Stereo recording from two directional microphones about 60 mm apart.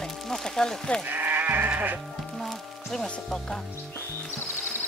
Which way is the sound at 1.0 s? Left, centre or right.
Right.